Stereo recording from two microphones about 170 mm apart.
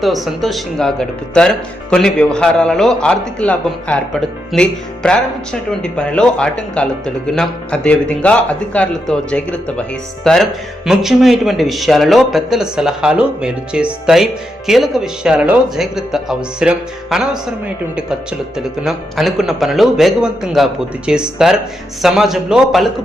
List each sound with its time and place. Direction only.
0.0 s speech: centre (ahead or behind)